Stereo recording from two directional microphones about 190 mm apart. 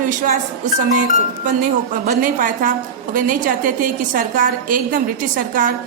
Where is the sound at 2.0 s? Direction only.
45° right (ahead or behind).